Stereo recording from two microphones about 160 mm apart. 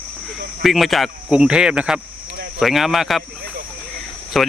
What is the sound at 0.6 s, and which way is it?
Speech, centre (ahead or behind).